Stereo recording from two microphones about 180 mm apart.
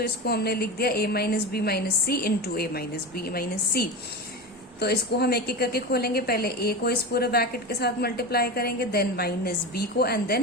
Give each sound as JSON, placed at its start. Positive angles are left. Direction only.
{"t": 0.0, "sound": "a woman's voice", "side_deg": 60}